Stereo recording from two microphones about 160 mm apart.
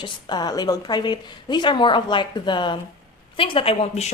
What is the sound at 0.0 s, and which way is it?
A woman's voice, 25° left (ahead or behind).